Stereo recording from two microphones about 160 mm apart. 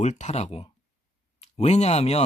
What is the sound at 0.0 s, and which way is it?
Speech, 45° left (ahead or behind).